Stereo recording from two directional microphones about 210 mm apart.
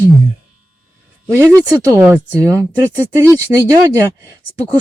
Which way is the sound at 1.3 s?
15° right (ahead or behind).